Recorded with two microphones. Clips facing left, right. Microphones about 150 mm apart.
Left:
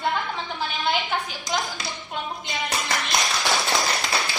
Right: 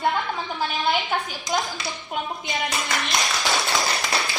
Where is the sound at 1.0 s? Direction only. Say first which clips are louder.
Right 1 dB; 20° right (ahead or behind).